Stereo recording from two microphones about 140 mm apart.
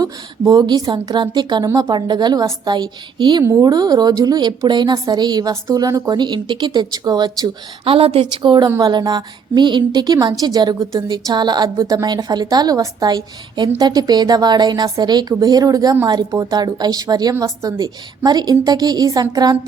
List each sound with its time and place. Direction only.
0.0 s a woman's voice: 30° right (ahead or behind)
7.9 s a woman's voice: 45° right (ahead or behind); by 19.5 s 25° right (ahead or behind)